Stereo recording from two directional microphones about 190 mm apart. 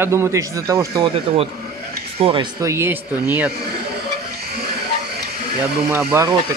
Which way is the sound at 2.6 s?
15° right (ahead or behind).